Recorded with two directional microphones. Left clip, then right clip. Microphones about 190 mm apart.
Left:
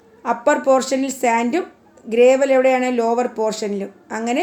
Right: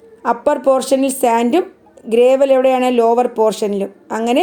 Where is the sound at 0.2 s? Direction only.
40° right (ahead or behind).